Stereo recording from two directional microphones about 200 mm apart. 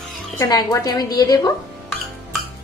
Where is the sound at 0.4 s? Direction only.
20° left (ahead or behind).